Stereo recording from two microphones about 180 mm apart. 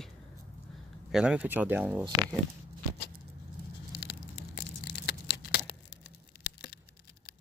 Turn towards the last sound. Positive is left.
turn(degrees=65)  # may be behind; listen again after turning